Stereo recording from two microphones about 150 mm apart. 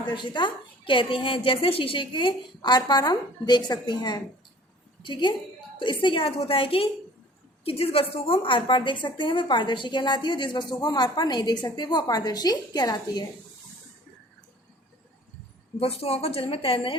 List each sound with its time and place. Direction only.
0.0 s a woman's voice: 30° left (ahead or behind)
15.8 s a woman's voice: 40° left (ahead or behind)